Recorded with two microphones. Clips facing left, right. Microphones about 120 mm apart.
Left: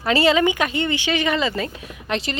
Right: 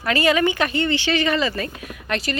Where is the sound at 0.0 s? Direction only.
25° left (ahead or behind).